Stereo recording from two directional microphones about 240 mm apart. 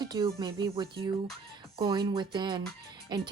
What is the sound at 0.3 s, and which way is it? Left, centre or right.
Speech, centre.